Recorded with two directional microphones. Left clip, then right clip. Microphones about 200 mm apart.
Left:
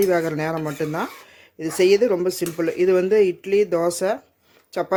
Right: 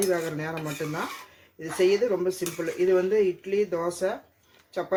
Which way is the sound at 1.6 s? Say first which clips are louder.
Left 6 dB; 50° left (ahead or behind).